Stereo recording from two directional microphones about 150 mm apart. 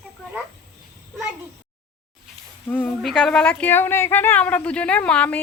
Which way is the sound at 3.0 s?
Centre (ahead or behind).